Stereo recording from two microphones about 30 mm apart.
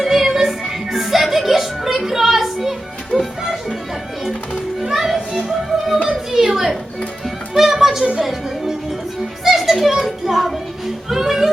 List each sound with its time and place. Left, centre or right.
0.0 s music: centre
4.8 s music: centre
6.3 s a sound: centre
7.5 s music: centre
9.4 s children playing: centre
9.9 s music: centre